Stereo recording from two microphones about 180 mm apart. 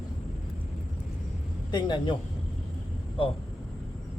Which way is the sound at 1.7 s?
25° left (ahead or behind).